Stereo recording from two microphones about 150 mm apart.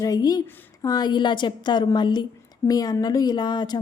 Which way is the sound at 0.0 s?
25° left (ahead or behind).